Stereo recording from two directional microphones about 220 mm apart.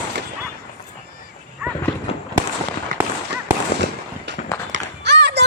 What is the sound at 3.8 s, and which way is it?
Fireworks, 55° right (ahead or behind).